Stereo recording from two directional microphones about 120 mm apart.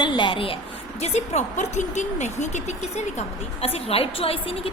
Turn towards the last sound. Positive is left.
turn(degrees=55)  # may be behind; listen again after turning